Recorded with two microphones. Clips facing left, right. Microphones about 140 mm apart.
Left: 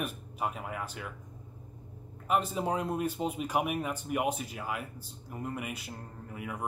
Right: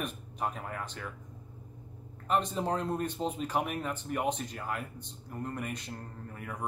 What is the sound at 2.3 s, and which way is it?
A man's voice, 5° left (ahead or behind).